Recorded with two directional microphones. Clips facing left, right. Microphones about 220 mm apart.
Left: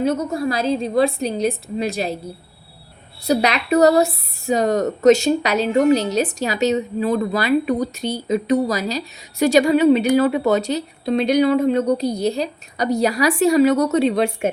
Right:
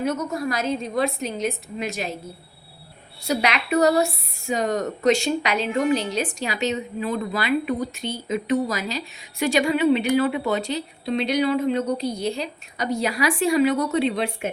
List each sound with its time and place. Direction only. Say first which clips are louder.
0.0 s speech: left 5 dB; 30° left (ahead or behind)
3.2 s speech: left 5 dB; 35° left (ahead or behind)